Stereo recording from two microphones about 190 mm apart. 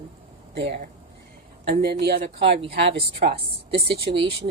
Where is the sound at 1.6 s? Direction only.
55° right (ahead or behind).